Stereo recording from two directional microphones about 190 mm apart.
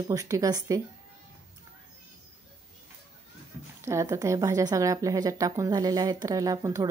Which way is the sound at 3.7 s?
15° right (ahead or behind).